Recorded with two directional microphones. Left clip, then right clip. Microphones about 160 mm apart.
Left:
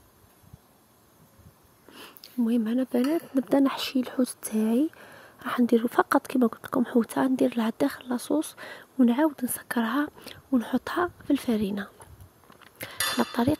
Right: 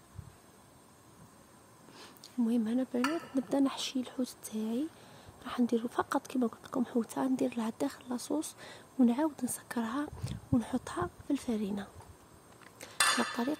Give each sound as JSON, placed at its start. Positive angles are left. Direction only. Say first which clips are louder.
{"t": 2.0, "sound": "speech", "louder": "left 5 dB", "side_deg": 25}
{"t": 12.7, "sound": "dishes", "louder": "left 2 dB", "side_deg": 35}